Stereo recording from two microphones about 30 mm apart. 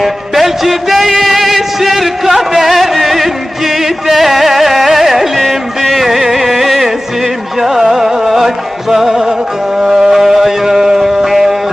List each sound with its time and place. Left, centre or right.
0.0 s music: centre